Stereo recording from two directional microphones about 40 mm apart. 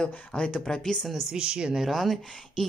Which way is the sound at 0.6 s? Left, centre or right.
Centre.